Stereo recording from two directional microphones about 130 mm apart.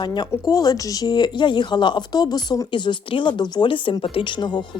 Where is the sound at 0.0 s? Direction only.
35° left (ahead or behind).